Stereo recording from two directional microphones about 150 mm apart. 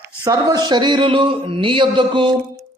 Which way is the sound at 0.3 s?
25° right (ahead or behind).